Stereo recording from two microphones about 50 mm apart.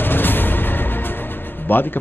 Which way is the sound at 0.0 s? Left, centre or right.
Left.